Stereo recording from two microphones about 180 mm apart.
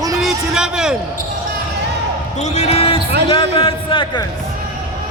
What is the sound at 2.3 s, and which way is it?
A man's voice, 40° left (ahead or behind).